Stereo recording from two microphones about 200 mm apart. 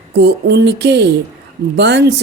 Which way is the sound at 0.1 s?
55° right (ahead or behind).